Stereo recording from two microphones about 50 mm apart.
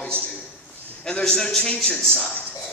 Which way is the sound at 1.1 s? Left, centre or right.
Centre.